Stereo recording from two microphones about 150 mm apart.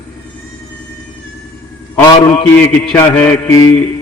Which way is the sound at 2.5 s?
15° left (ahead or behind).